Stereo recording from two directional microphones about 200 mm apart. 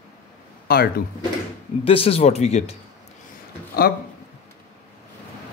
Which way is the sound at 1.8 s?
30° left (ahead or behind).